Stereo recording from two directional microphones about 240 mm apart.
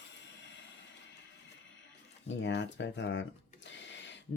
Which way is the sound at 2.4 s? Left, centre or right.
Left.